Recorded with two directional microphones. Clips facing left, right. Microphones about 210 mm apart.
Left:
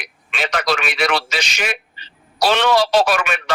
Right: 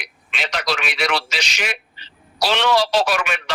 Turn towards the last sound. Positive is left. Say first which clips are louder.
# left 3 dB
turn(degrees=50)  # may be behind; listen again after turning